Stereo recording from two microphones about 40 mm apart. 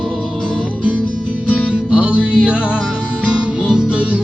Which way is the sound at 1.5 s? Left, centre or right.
Left.